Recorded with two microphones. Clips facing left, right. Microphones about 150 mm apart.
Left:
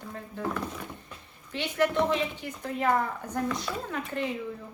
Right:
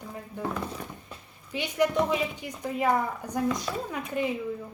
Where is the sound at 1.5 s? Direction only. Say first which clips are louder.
Right 1 dB; 10° right (ahead or behind).